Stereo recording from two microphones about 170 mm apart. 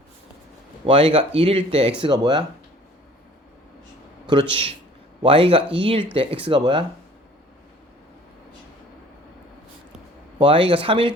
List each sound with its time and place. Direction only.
0.9 s a man's voice: 35° right (ahead or behind)
4.3 s a man's voice: 30° right (ahead or behind)
10.3 s speech: 30° right (ahead or behind)